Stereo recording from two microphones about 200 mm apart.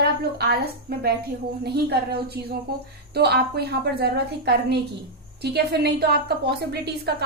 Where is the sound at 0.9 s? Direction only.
50° right (ahead or behind).